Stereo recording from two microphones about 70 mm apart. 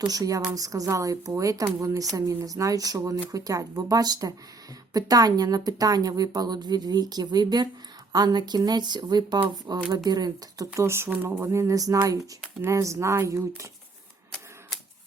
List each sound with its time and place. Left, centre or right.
0.0 s a woman's voice: right
8.1 s speech: right
10.1 s a woman's voice: right
10.8 s speech: right
11.3 s a sound: right